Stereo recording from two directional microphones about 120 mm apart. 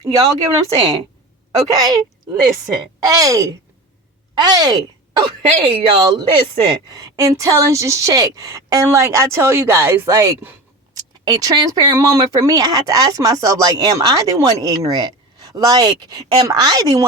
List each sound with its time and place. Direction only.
0.0 s speech: 30° right (ahead or behind)
3.0 s a woman's voice: 25° right (ahead or behind)